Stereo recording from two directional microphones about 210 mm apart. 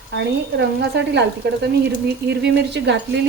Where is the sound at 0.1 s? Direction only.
55° right (ahead or behind).